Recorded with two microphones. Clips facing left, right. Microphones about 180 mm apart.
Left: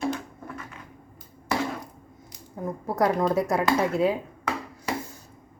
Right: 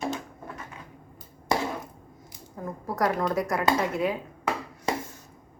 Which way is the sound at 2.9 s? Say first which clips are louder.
Left 3 dB; 25° left (ahead or behind).